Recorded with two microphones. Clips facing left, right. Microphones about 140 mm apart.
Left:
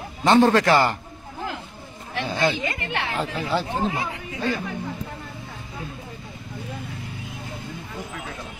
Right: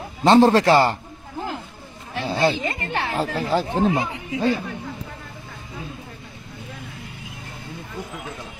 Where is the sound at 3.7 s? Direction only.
25° right (ahead or behind).